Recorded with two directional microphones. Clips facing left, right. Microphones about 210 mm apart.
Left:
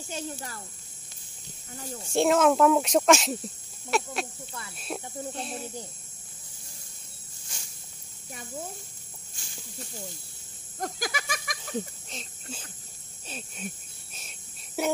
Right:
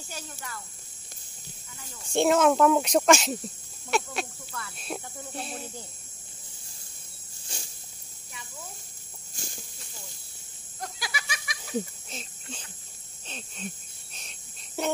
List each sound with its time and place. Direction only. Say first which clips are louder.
0.1 s speech: left 6 dB; 35° left (ahead or behind)
1.7 s speech: left 11 dB; 35° left (ahead or behind)
2.1 s speech: even; centre (ahead or behind)
4.5 s speech: right 2 dB; 20° left (ahead or behind)
4.7 s speech: left 3 dB; centre (ahead or behind)
7.5 s snake: right 5 dB; 30° right (ahead or behind)
8.3 s a child's voice: left 8 dB; 45° left (ahead or behind)
9.8 s a child's voice: left 8 dB; 50° left (ahead or behind)
10.8 s goat: left 5 dB; 45° left (ahead or behind)
12.1 s speech: even; centre (ahead or behind)
13.3 s wheeze: left 1 dB; 10° left (ahead or behind)
14.8 s wheeze: left 1 dB; 10° left (ahead or behind)